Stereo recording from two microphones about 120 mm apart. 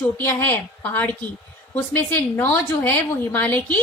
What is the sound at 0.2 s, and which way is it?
A woman's voice, 15° left (ahead or behind).